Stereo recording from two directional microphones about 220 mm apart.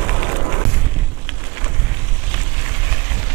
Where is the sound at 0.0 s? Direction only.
15° right (ahead or behind).